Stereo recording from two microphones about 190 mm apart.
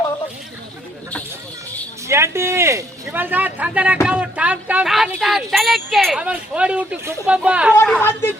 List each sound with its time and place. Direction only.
2.0 s speech: 15° right (ahead or behind)
7.9 s a woman's voice: 10° left (ahead or behind)